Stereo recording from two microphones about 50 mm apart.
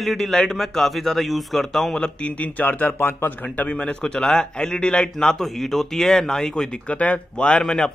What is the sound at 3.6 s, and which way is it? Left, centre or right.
A man's voice, left.